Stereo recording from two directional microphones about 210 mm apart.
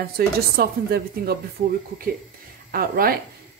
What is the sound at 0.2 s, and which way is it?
Speech, 50° right (ahead or behind).